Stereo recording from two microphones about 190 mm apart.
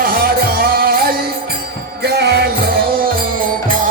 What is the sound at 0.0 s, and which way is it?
Music, 50° right (ahead or behind).